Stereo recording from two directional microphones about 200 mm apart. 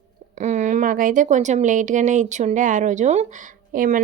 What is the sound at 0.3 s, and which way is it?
Speech, 35° right (ahead or behind).